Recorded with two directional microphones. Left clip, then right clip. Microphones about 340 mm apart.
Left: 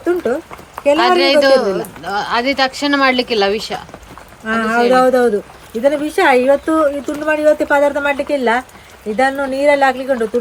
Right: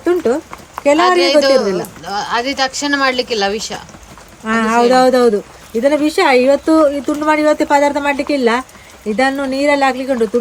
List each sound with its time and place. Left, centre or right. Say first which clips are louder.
0.0 s a sound: right 2 dB; right
0.9 s speech: even; centre
4.4 s a woman's voice: right 1 dB; right